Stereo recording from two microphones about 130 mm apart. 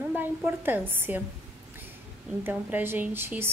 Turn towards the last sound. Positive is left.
turn(degrees=-15)  # may be behind; listen again after turning